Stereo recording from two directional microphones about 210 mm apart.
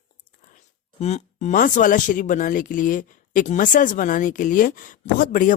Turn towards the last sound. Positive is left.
turn(degrees=40)  # may be behind; listen again after turning